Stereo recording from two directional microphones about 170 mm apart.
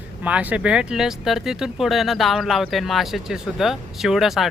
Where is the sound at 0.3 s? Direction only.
5° right (ahead or behind).